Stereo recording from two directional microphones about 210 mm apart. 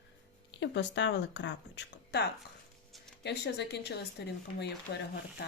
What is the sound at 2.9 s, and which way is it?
Music, centre (ahead or behind).